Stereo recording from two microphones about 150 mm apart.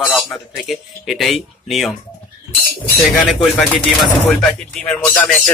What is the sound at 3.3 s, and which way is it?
Speech, centre (ahead or behind).